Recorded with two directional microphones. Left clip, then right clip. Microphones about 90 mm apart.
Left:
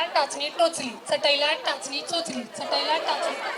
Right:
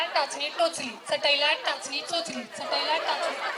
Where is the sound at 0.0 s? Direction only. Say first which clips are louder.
Left 2 dB; 15° left (ahead or behind).